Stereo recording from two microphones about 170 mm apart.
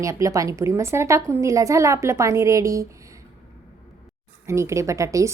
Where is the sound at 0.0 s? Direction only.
20° right (ahead or behind).